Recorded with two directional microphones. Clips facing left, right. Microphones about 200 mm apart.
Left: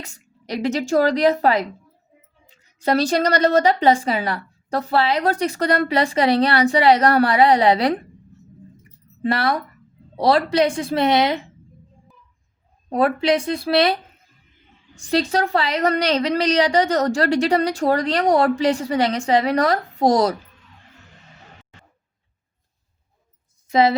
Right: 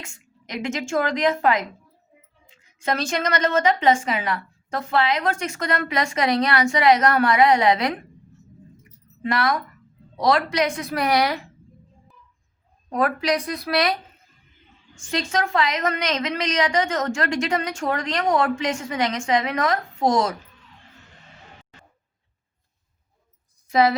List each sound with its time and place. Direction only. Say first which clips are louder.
0.0 s a woman's voice: left 3 dB; 35° left (ahead or behind)
9.2 s a woman's voice: left 2 dB; 35° left (ahead or behind)
12.9 s a woman's voice: left 4 dB; 30° left (ahead or behind)